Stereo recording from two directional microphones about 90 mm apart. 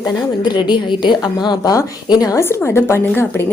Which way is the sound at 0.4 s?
55° left (ahead or behind).